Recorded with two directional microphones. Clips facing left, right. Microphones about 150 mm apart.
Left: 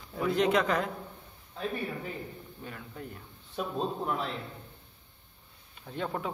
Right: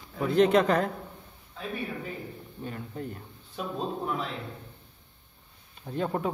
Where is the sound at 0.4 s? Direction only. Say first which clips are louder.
Right 6 dB; 45° right (ahead or behind).